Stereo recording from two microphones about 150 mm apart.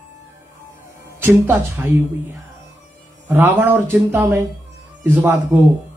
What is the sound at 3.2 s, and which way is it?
A man's voice, 10° right (ahead or behind).